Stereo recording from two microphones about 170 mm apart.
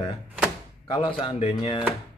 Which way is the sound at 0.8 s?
30° left (ahead or behind).